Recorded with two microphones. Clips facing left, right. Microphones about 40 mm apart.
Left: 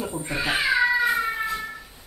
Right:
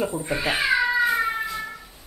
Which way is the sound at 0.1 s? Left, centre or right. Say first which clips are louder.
Right 1 dB; centre.